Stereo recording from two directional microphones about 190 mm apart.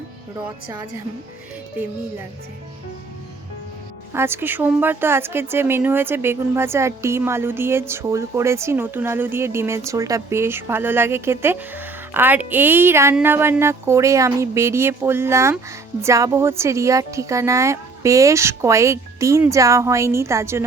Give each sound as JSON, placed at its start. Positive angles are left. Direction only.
{"t": 0.4, "sound": "speech", "side_deg": -15}
{"t": 4.1, "sound": "speech", "side_deg": -10}